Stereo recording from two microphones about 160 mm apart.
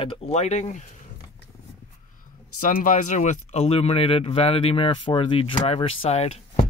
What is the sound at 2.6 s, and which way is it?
Speech, 55° left (ahead or behind).